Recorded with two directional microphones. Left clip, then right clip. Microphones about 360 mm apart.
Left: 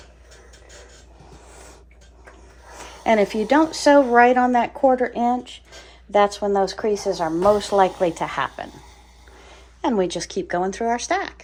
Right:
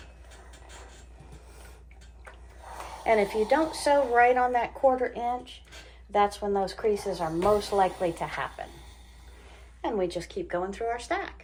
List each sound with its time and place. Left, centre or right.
3.0 s speech: left
9.8 s speech: left